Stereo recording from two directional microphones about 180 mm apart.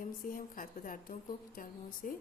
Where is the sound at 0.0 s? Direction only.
50° left (ahead or behind).